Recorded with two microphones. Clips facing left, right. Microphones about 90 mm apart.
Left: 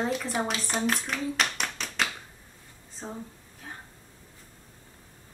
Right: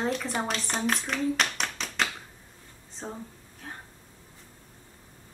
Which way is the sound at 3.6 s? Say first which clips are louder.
Right 1 dB; centre (ahead or behind).